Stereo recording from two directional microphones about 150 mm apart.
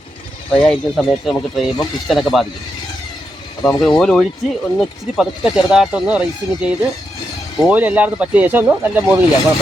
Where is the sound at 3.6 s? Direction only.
Centre (ahead or behind).